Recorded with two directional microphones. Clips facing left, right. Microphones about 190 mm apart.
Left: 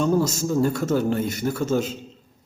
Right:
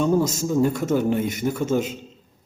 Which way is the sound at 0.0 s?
10° right (ahead or behind).